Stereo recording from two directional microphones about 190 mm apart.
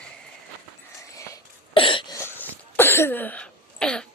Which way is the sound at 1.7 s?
25° left (ahead or behind).